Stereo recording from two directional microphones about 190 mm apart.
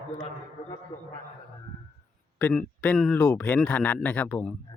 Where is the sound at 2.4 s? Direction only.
10° left (ahead or behind).